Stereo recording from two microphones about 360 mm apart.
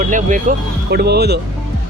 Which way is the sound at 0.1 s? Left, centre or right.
Right.